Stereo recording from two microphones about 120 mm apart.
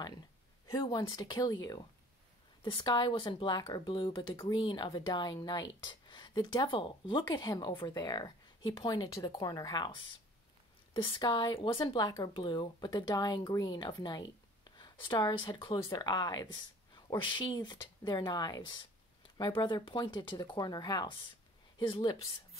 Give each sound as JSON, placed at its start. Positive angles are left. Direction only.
{"t": 0.7, "sound": "speech", "side_deg": 30}